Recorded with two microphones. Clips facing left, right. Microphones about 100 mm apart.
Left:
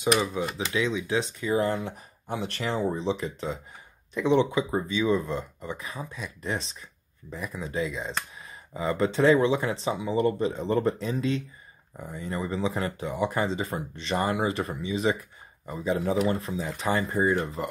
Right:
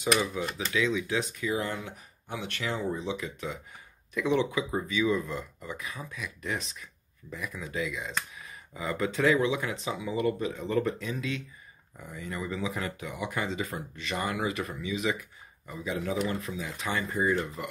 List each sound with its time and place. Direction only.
0.2 s speech: 20° left (ahead or behind)
1.5 s speech: 35° left (ahead or behind)